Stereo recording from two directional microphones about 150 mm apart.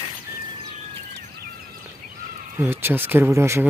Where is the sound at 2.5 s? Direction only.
15° right (ahead or behind).